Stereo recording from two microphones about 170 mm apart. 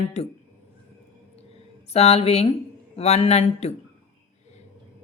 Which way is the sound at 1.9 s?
40° left (ahead or behind).